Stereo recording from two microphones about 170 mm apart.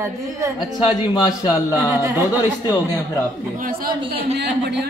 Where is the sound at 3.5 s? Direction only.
55° right (ahead or behind).